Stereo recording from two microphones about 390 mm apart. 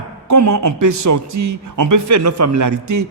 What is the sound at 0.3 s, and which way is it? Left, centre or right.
A man's voice, right.